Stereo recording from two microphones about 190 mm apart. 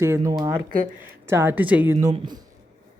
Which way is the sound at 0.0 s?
15° right (ahead or behind).